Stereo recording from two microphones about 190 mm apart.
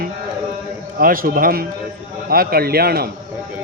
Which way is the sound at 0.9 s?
50° right (ahead or behind).